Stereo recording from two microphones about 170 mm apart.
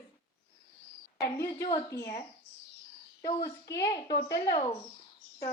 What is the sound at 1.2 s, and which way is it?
A woman's voice, 20° left (ahead or behind).